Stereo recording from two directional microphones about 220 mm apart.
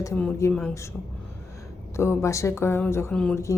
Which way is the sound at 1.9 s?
10° left (ahead or behind).